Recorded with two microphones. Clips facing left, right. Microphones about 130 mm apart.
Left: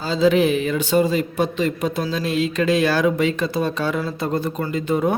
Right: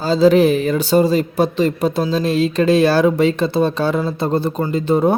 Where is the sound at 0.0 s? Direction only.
40° right (ahead or behind).